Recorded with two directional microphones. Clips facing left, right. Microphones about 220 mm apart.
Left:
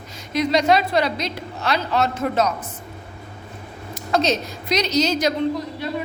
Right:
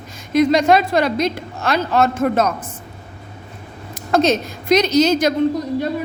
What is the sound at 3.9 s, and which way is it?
Speech, 50° right (ahead or behind).